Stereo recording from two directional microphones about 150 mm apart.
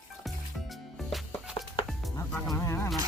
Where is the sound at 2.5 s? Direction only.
20° left (ahead or behind).